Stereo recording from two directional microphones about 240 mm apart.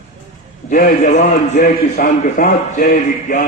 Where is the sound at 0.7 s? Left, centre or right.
Left.